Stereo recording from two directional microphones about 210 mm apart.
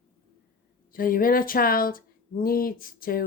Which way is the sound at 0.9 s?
40° left (ahead or behind).